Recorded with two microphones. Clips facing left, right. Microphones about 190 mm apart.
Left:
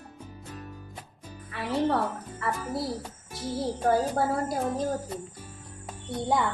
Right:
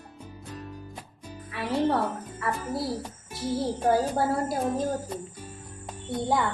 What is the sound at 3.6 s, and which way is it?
Speech, 5° right (ahead or behind).